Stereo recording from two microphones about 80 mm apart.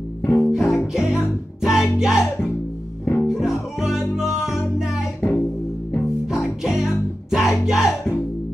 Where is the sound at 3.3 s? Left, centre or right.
Centre.